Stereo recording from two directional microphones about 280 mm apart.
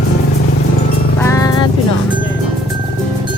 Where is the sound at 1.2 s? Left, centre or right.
Centre.